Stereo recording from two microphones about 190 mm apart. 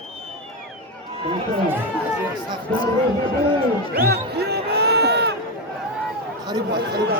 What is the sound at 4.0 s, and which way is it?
Crowd, 60° right (ahead or behind).